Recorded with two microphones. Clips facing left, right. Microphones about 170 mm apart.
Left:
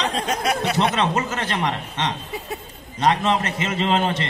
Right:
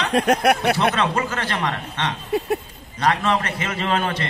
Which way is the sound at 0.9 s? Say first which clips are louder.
Even; 20° left (ahead or behind).